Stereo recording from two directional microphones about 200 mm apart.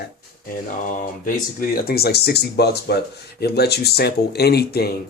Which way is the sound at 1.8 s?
50° left (ahead or behind).